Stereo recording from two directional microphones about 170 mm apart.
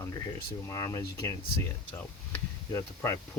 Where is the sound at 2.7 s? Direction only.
15° left (ahead or behind).